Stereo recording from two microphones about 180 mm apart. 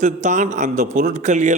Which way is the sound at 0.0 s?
40° right (ahead or behind).